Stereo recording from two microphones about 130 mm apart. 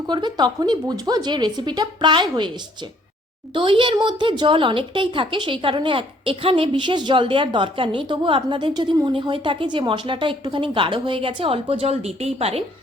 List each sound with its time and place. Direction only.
0.1 s a woman's voice: 35° right (ahead or behind)
3.5 s a woman's voice: 40° right (ahead or behind)